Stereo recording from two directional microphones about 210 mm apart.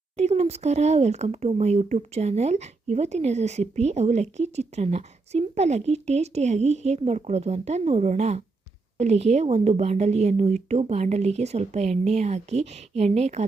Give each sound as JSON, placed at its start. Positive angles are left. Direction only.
{"t": 0.2, "sound": "speech", "side_deg": -30}